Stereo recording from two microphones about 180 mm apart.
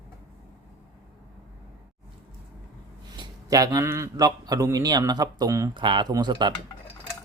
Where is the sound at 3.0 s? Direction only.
25° right (ahead or behind).